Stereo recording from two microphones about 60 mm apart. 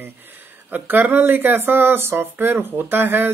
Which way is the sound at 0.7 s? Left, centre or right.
Right.